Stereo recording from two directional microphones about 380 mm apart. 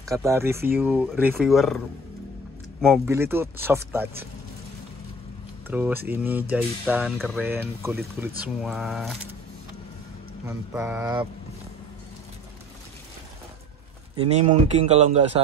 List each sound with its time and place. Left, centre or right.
0.0 s speech: centre
2.8 s speech: centre
5.7 s speech: centre
10.4 s speech: centre
14.1 s speech: centre